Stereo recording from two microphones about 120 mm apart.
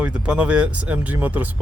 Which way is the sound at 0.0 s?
10° right (ahead or behind).